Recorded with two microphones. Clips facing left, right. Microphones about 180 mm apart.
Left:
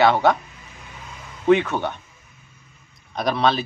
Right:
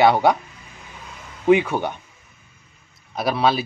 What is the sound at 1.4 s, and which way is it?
Speech, 10° right (ahead or behind).